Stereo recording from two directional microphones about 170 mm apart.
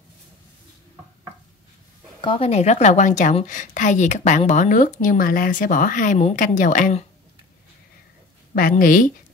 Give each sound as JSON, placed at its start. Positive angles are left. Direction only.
{"t": 2.2, "sound": "a woman's voice", "side_deg": 35}
{"t": 8.5, "sound": "a woman's voice", "side_deg": 55}